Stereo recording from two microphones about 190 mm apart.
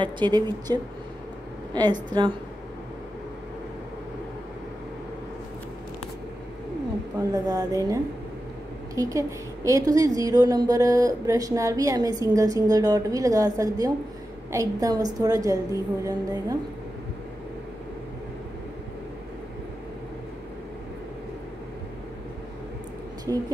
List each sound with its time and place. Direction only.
0.0 s a woman's voice: 25° right (ahead or behind)
7.3 s a woman's voice: 20° right (ahead or behind)